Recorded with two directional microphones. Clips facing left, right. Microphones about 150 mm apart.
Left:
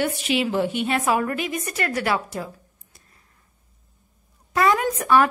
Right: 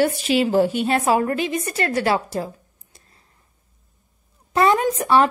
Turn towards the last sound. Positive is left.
turn(degrees=-25)  # may be behind; listen again after turning